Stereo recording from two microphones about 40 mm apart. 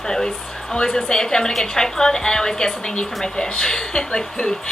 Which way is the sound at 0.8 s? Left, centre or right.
Centre.